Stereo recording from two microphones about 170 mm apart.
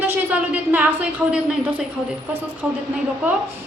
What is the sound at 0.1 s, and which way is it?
A woman's voice, 10° right (ahead or behind).